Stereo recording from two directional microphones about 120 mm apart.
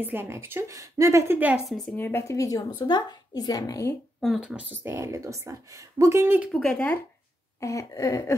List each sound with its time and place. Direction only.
0.0 s a woman's voice: 20° right (ahead or behind)
1.7 s speech: 5° left (ahead or behind)
2.0 s a sound: 20° left (ahead or behind)
2.9 s speech: 35° left (ahead or behind)
4.2 s speech: 5° right (ahead or behind)
4.8 s a woman's voice: 20° right (ahead or behind)
6.5 s speech: 5° left (ahead or behind)
7.6 s a sound: 25° left (ahead or behind)